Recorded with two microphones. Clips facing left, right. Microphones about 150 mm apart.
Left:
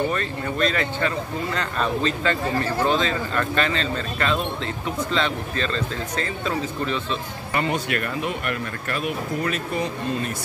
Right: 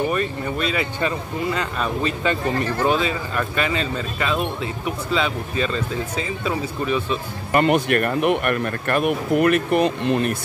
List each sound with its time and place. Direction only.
0.1 s speech: 10° right (ahead or behind)
7.5 s speech: 60° right (ahead or behind)